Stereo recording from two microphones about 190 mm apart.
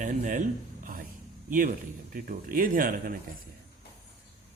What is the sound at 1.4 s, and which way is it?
Speech, 45° right (ahead or behind).